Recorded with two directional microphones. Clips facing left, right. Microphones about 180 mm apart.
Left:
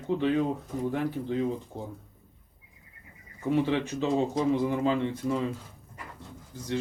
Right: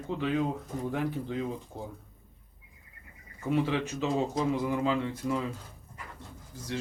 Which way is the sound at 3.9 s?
30° left (ahead or behind).